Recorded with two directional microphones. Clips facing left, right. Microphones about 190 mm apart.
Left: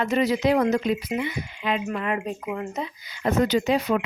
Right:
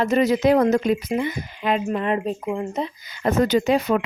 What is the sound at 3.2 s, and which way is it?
Speech, 50° right (ahead or behind).